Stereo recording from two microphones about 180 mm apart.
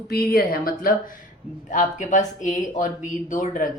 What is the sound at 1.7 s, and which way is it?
A woman's voice, 45° left (ahead or behind).